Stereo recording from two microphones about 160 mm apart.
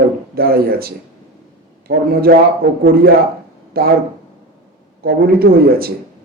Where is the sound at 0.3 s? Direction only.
70° right (ahead or behind).